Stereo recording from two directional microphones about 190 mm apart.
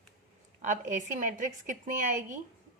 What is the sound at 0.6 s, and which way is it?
A woman's voice, 40° right (ahead or behind).